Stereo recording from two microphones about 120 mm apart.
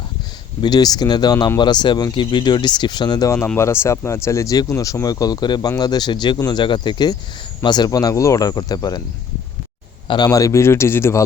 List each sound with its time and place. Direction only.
0.6 s speech: 35° left (ahead or behind)
3.3 s speech: 15° left (ahead or behind); by 9.0 s 35° left (ahead or behind)
10.1 s speech: 35° left (ahead or behind)